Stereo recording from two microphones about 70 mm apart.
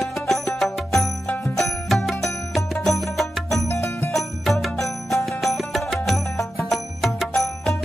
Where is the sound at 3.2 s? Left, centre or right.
Left.